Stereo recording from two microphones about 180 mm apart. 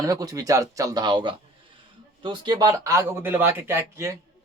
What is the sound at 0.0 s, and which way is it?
Speech, 20° right (ahead or behind).